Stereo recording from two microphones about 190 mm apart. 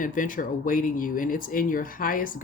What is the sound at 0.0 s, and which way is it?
Speech, 45° left (ahead or behind).